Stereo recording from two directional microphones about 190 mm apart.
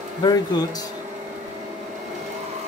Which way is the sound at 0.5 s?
20° left (ahead or behind).